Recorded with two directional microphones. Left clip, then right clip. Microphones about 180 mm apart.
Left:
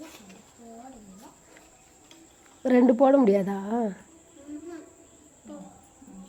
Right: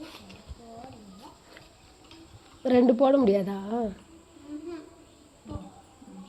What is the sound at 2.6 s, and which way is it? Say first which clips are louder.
A woman's voice: left 1 dB; 25° left (ahead or behind).